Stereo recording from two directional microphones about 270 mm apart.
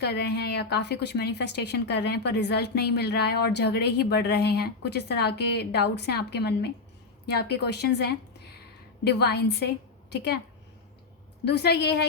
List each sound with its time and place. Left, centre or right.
0.0 s a woman's voice: left
11.4 s a woman's voice: left